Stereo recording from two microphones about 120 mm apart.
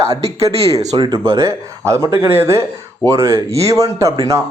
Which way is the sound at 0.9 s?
40° right (ahead or behind).